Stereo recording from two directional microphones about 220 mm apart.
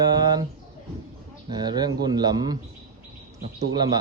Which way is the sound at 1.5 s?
20° right (ahead or behind).